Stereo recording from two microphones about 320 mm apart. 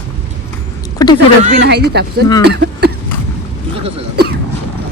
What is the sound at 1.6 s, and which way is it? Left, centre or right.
Speech, right.